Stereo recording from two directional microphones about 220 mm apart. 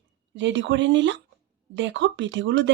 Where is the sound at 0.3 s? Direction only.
55° right (ahead or behind).